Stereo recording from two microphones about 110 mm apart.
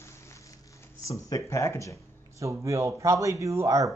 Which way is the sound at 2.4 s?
25° right (ahead or behind).